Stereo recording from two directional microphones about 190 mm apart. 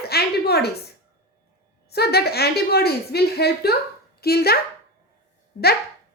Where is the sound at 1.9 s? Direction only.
55° left (ahead or behind).